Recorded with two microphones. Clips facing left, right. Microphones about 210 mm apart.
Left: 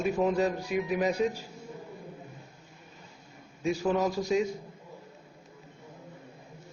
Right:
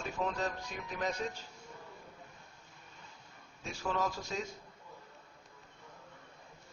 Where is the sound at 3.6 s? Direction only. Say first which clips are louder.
Left 9 dB; 15° left (ahead or behind).